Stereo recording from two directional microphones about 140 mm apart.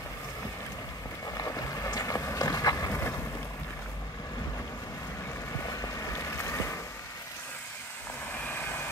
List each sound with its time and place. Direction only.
1.2 s boat: 25° left (ahead or behind)
5.7 s boat: 25° left (ahead or behind)